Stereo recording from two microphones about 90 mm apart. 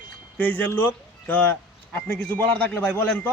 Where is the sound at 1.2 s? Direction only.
20° left (ahead or behind).